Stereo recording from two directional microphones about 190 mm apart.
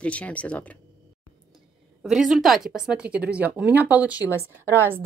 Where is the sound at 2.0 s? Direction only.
Centre (ahead or behind).